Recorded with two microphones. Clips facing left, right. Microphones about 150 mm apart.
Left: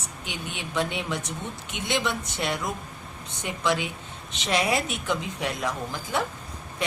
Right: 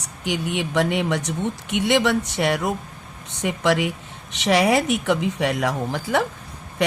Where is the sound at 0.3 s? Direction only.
75° right (ahead or behind).